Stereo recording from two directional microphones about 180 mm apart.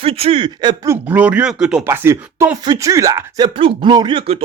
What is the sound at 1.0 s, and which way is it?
Speech, 10° right (ahead or behind).